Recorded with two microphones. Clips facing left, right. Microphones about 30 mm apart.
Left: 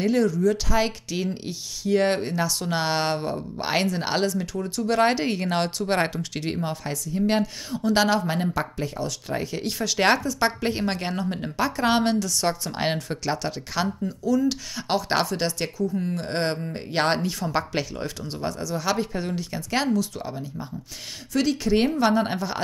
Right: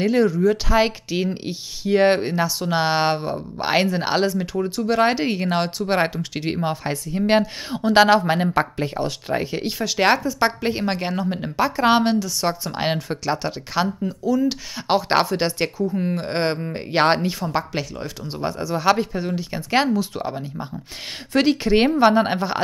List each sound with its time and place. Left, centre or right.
0.0 s speech: right
17.5 s speech: centre
18.3 s speech: right
18.9 s speech: centre
19.5 s speech: right